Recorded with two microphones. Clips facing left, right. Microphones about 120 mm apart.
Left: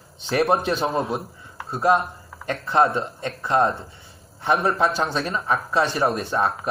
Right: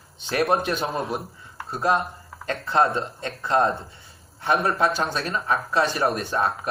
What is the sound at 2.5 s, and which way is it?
Speech, 20° left (ahead or behind).